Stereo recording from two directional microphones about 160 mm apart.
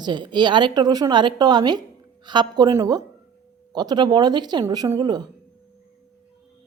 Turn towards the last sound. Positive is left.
turn(degrees=-25)  # may be behind; listen again after turning